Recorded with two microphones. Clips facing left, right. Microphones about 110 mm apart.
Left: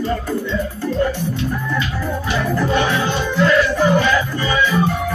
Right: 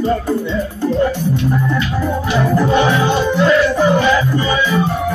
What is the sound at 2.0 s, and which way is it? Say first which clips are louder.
Music: right 4 dB; 20° right (ahead or behind).